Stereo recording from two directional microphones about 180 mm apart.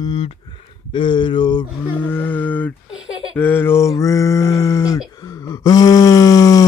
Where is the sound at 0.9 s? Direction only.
25° left (ahead or behind).